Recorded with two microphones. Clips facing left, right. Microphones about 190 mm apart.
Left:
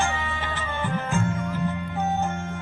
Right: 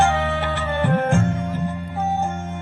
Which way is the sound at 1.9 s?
10° right (ahead or behind).